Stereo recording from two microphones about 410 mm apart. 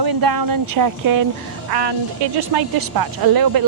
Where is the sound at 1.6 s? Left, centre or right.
Right.